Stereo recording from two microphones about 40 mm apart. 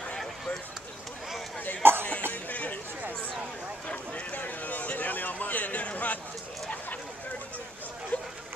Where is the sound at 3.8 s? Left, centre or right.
Left.